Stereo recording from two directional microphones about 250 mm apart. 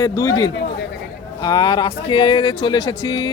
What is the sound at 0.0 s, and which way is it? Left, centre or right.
Speech, centre.